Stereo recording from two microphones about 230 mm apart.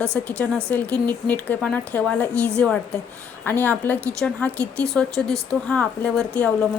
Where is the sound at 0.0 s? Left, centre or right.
Centre.